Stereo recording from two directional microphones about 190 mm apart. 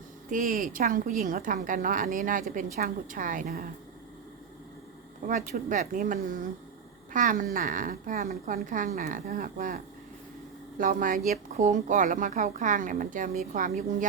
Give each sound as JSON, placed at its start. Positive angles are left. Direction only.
{"t": 0.3, "sound": "a woman's voice", "side_deg": -45}
{"t": 5.3, "sound": "a woman's voice", "side_deg": -45}